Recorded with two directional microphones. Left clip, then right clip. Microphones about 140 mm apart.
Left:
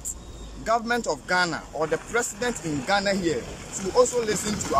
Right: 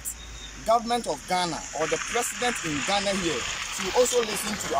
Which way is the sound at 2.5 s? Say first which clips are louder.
Right 1 dB; 60° left (ahead or behind).